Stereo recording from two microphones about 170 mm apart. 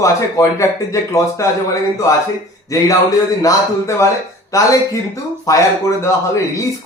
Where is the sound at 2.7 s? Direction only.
20° left (ahead or behind).